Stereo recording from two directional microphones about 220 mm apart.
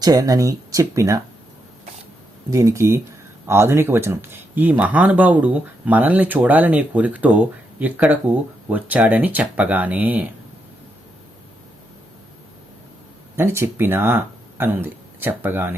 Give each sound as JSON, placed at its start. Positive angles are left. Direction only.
{"t": 0.0, "sound": "speech", "side_deg": -15}
{"t": 2.5, "sound": "speech", "side_deg": -15}
{"t": 13.3, "sound": "speech", "side_deg": -10}